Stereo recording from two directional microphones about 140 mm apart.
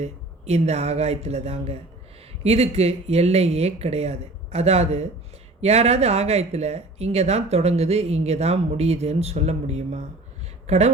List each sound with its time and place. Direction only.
0.0 s speech: 50° right (ahead or behind)